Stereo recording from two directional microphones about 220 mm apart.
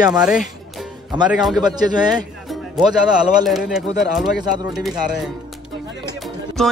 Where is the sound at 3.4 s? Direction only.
Centre (ahead or behind).